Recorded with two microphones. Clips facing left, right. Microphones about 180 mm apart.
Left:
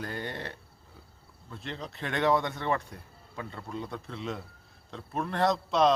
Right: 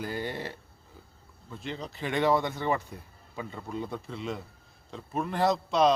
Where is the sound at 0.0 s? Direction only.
5° right (ahead or behind).